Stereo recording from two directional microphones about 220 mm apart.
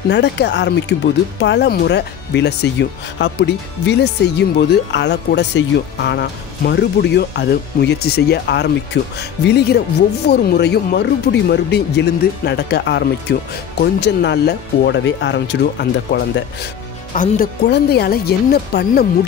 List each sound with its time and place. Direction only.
0.1 s speech: 50° left (ahead or behind)
17.1 s speech: 40° left (ahead or behind)